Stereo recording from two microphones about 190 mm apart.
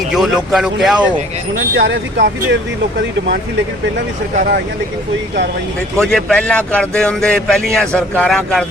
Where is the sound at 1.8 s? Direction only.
65° right (ahead or behind).